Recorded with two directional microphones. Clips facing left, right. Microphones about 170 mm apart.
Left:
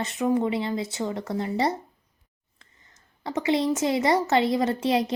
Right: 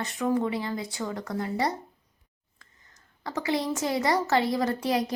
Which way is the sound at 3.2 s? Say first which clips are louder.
Left 4 dB; 20° left (ahead or behind).